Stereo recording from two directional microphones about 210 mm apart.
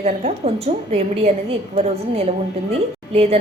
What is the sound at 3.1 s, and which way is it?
Speech, 30° right (ahead or behind).